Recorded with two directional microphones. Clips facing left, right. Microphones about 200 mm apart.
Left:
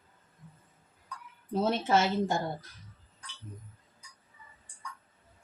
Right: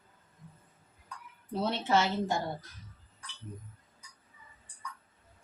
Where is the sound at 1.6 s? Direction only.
50° left (ahead or behind).